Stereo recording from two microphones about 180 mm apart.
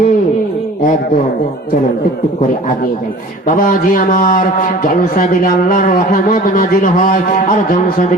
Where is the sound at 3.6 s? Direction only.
50° left (ahead or behind).